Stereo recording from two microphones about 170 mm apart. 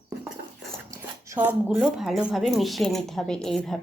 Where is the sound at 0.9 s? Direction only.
15° right (ahead or behind).